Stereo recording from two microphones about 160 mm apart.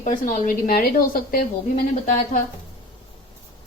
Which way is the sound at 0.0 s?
55° left (ahead or behind).